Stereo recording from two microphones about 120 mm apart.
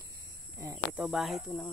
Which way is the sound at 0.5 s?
25° right (ahead or behind).